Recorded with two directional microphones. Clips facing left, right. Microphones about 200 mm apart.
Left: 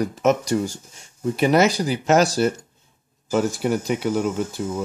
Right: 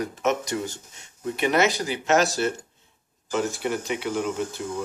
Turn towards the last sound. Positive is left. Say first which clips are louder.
# left 3 dB
turn(degrees=45)  # may be behind; listen again after turning